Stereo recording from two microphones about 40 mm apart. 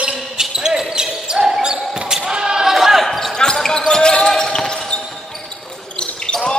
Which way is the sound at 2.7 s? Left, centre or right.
Centre.